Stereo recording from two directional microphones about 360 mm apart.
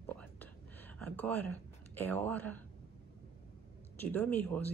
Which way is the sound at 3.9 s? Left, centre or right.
Centre.